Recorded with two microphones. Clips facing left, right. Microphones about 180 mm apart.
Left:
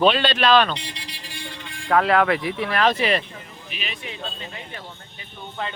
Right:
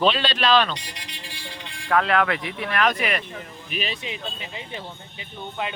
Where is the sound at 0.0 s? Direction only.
55° left (ahead or behind).